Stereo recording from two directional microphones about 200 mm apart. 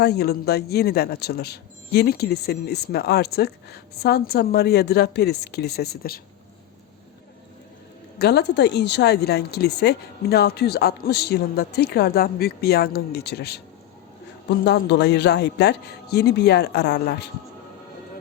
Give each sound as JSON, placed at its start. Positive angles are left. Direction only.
{"t": 0.0, "sound": "a woman's voice", "side_deg": 55}
{"t": 8.2, "sound": "a woman's voice", "side_deg": 55}
{"t": 14.6, "sound": "a man's voice", "side_deg": 55}